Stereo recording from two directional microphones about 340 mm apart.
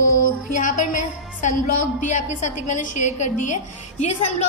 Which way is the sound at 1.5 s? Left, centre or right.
Left.